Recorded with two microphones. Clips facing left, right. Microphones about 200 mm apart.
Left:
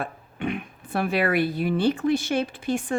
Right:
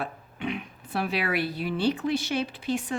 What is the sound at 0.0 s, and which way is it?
Speech, 50° left (ahead or behind).